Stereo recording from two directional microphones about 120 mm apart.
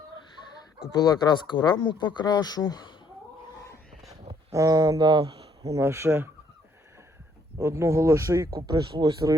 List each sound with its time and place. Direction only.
0.9 s speech: 35° left (ahead or behind)
4.5 s speech: 30° right (ahead or behind)
5.7 s speech: 20° right (ahead or behind)
7.6 s speech: 20° right (ahead or behind); by 9.3 s 40° right (ahead or behind)